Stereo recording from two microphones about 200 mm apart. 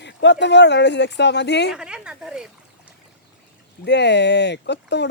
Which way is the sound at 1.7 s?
5° right (ahead or behind).